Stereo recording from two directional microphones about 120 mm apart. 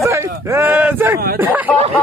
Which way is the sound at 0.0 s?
25° right (ahead or behind).